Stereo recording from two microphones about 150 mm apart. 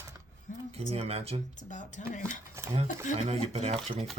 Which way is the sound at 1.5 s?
55° left (ahead or behind).